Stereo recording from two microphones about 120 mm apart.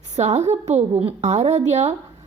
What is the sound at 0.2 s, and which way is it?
A woman's voice, 70° right (ahead or behind).